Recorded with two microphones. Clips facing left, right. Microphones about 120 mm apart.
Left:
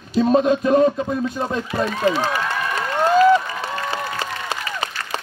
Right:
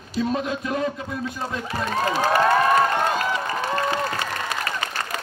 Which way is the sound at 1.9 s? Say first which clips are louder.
Right 2 dB; 45° right (ahead or behind).